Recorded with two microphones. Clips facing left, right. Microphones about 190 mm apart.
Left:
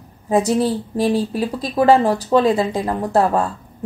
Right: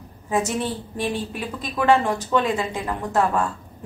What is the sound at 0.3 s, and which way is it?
Speech, 35° left (ahead or behind).